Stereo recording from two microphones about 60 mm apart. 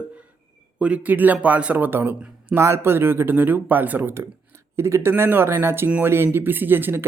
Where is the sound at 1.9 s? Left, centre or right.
Right.